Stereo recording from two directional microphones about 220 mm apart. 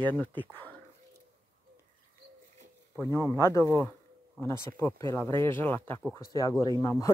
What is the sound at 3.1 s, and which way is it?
Speech, 10° right (ahead or behind).